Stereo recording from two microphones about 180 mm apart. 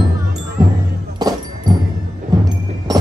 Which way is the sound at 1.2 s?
20° right (ahead or behind).